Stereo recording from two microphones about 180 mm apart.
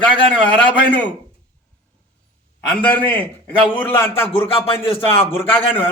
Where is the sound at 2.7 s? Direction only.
10° left (ahead or behind).